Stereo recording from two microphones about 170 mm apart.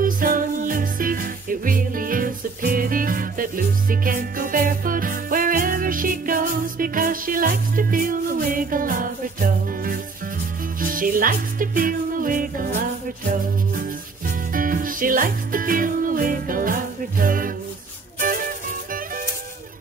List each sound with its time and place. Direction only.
0.0 s music: 55° right (ahead or behind)
13.7 s music: 55° right (ahead or behind)